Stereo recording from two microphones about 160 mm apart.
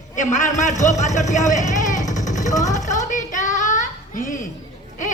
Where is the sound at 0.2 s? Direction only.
50° left (ahead or behind).